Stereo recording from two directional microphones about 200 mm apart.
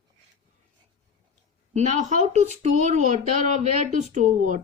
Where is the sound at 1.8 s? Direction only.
35° right (ahead or behind).